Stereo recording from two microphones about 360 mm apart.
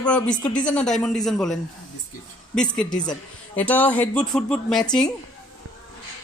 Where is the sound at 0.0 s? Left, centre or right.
Centre.